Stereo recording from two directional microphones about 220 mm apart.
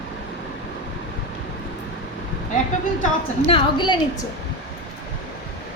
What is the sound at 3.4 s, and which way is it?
Speech, 20° left (ahead or behind).